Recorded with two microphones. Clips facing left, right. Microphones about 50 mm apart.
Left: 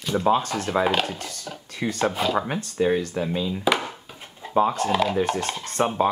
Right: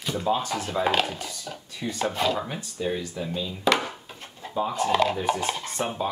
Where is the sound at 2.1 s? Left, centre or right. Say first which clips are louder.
Left 1 dB; centre.